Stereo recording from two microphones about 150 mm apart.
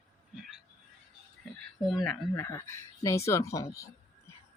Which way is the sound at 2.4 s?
20° left (ahead or behind).